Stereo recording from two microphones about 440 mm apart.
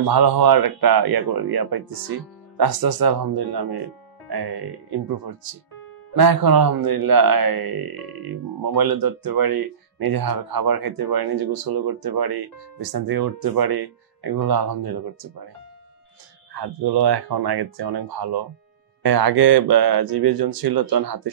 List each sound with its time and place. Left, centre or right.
0.0 s speech: right
16.5 s speech: right